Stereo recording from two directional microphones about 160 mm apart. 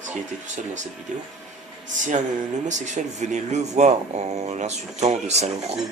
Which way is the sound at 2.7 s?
50° right (ahead or behind).